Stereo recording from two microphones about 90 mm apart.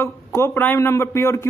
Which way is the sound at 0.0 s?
25° left (ahead or behind).